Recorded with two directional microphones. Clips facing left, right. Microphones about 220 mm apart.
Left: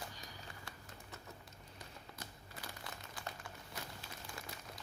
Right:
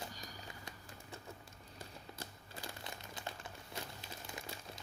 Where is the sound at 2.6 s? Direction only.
25° right (ahead or behind).